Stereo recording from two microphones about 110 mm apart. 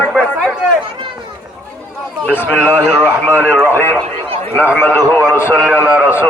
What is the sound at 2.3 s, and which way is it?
A man's voice, 20° left (ahead or behind).